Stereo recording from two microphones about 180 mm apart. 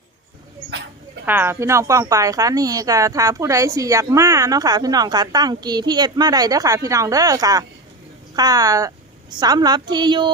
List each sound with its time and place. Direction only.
1.2 s speech: 10° right (ahead or behind)